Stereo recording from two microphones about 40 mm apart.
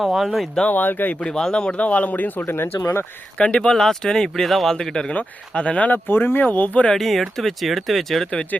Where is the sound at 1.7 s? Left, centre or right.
Left.